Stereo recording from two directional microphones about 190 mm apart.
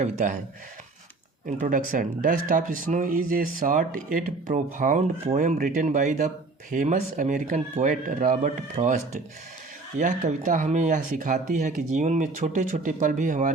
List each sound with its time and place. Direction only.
0.0 s speech: 40° right (ahead or behind)
1.5 s speech: 45° right (ahead or behind)